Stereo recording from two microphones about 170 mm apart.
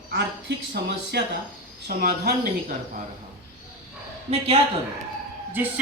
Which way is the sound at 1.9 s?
60° right (ahead or behind).